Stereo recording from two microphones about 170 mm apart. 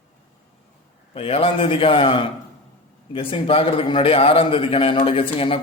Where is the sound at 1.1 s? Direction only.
35° left (ahead or behind).